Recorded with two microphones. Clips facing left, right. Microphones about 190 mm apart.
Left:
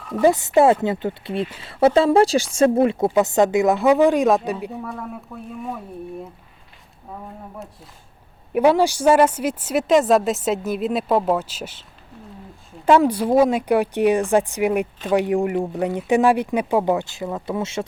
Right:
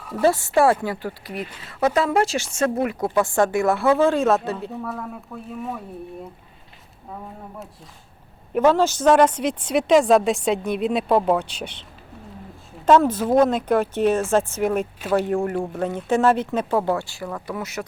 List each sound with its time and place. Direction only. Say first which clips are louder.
0.2 s speech: left 3 dB; 20° left (ahead or behind)
4.8 s a woman's voice: even; centre (ahead or behind)
8.5 s a woman's voice: left 1 dB; 10° left (ahead or behind)